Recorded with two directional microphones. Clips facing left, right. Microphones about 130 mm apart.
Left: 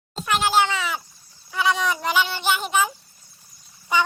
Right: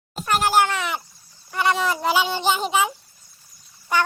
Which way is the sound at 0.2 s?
5° right (ahead or behind).